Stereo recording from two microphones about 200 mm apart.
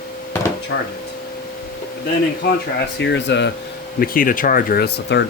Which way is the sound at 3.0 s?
60° left (ahead or behind).